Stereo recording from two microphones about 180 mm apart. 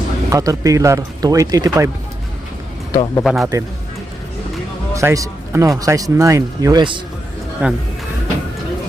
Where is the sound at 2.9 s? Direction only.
20° left (ahead or behind).